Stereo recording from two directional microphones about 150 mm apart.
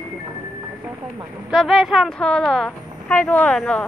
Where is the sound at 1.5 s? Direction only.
Centre (ahead or behind).